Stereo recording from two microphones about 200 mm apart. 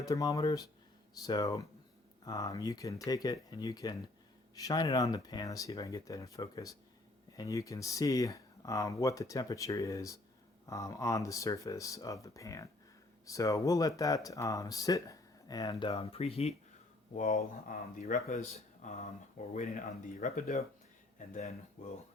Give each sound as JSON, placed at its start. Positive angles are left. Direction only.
{"t": 0.0, "sound": "speech", "side_deg": 15}
{"t": 16.0, "sound": "speech", "side_deg": 30}